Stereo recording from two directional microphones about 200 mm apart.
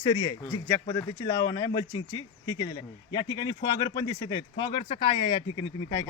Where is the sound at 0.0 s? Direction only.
25° left (ahead or behind).